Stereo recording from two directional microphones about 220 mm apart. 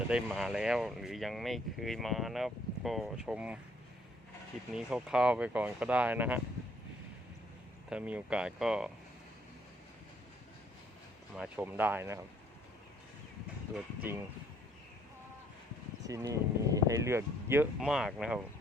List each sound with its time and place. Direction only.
0.1 s speech: 5° right (ahead or behind)
4.7 s speech: 5° right (ahead or behind)
7.9 s speech: 5° right (ahead or behind)
11.3 s speech: 5° right (ahead or behind)
13.7 s speech: 10° right (ahead or behind)
16.0 s speech: 15° right (ahead or behind)